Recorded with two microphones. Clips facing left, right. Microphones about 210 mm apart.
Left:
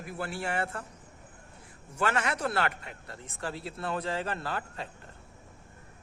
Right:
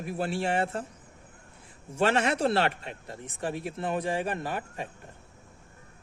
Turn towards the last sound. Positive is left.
turn(degrees=-15)  # may be behind; listen again after turning